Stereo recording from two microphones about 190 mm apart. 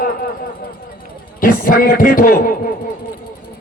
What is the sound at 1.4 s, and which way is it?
A man's voice, 50° left (ahead or behind).